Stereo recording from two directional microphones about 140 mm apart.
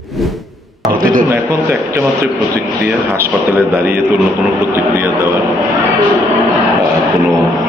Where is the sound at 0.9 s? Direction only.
90° right.